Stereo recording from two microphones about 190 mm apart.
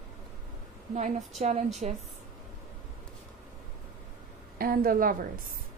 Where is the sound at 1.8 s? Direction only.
35° right (ahead or behind).